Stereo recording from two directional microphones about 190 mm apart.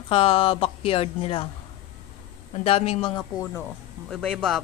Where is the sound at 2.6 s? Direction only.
30° left (ahead or behind).